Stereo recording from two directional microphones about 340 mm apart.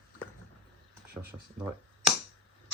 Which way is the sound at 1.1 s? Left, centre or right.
Centre.